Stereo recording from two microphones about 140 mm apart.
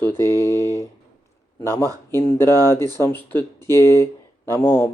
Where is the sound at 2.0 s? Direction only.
20° left (ahead or behind).